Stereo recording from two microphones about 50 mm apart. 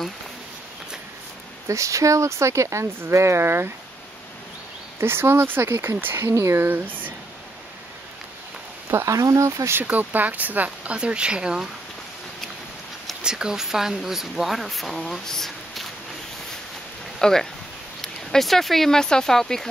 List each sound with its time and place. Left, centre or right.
1.7 s speech: right
3.0 s speech: right
5.0 s speech: right
6.2 s speech: right
6.7 s speech: right
8.9 s speech: right
9.8 s speech: right; by 11.7 s centre
13.2 s speech: centre
17.2 s speech: centre